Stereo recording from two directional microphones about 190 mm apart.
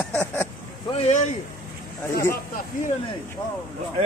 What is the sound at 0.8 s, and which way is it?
Speech, 35° left (ahead or behind).